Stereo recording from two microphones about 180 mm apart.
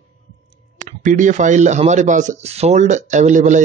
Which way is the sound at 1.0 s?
45° right (ahead or behind).